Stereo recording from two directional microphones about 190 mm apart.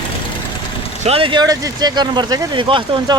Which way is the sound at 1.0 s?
30° right (ahead or behind).